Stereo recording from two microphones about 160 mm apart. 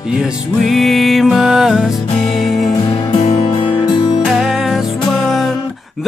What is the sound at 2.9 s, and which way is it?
Music, 35° left (ahead or behind).